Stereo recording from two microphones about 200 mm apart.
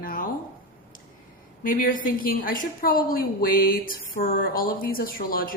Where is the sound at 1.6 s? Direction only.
45° left (ahead or behind).